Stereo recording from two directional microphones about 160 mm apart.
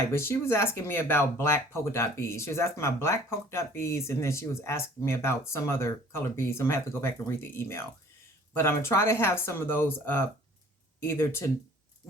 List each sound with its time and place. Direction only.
0.1 s speech: 15° left (ahead or behind)